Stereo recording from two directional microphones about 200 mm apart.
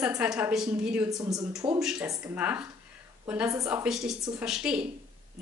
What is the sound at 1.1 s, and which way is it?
Speech, 15° right (ahead or behind).